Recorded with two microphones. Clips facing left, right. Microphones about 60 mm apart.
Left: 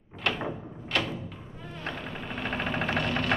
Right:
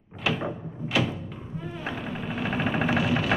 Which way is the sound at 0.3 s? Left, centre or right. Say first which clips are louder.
Right 2 dB; centre.